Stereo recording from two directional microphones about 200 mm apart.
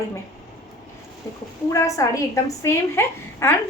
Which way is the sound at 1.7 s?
15° left (ahead or behind).